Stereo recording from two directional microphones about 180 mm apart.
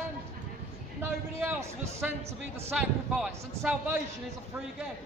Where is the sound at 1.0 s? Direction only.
15° right (ahead or behind).